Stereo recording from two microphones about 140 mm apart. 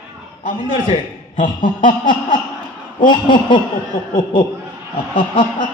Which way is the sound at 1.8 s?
35° left (ahead or behind).